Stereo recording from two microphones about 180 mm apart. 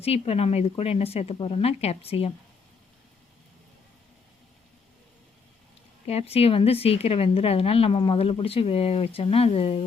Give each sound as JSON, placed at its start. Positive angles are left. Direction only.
{"t": 0.0, "sound": "a woman's voice", "side_deg": 35}
{"t": 6.1, "sound": "a woman's voice", "side_deg": 35}